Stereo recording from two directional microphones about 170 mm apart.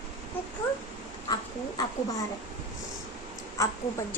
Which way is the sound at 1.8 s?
20° left (ahead or behind).